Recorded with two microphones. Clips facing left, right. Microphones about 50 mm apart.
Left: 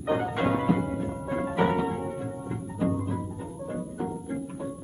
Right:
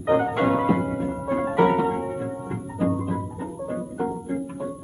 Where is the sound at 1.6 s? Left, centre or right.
Centre.